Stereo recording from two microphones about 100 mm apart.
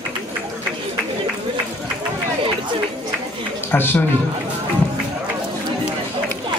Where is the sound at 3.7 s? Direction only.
20° left (ahead or behind).